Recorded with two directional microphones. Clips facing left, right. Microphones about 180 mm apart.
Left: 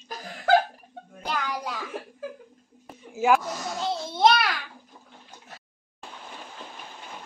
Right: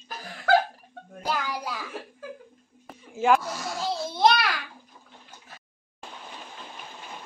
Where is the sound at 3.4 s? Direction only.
20° left (ahead or behind).